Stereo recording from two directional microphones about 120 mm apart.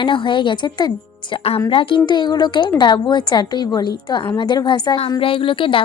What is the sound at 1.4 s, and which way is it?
A woman's voice, 55° left (ahead or behind).